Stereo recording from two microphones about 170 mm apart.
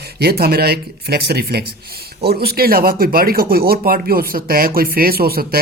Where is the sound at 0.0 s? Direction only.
65° right (ahead or behind).